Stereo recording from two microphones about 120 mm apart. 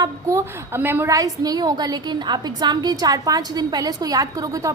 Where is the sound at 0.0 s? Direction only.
25° right (ahead or behind).